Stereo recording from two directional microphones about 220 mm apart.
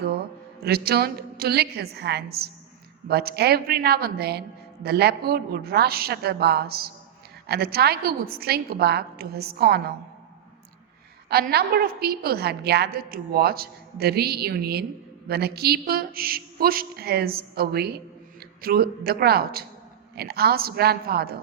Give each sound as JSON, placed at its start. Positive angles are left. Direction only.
{"t": 0.6, "sound": "a woman's voice", "side_deg": -45}
{"t": 11.3, "sound": "a woman's voice", "side_deg": -45}